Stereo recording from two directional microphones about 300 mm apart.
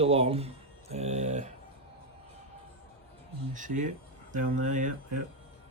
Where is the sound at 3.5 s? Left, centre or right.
Right.